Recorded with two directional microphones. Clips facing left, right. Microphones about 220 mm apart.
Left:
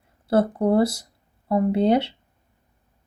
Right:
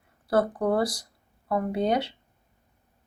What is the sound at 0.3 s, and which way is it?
Speech, 25° left (ahead or behind).